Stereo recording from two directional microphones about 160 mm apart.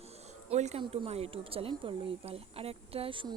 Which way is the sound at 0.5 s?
40° right (ahead or behind).